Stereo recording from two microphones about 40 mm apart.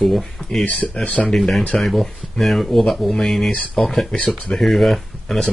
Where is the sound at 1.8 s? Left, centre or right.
Centre.